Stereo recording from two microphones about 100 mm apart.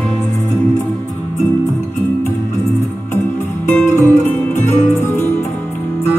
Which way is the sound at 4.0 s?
20° left (ahead or behind).